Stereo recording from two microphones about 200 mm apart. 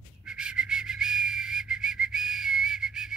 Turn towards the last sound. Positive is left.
turn(degrees=-5)  # may be behind; listen again after turning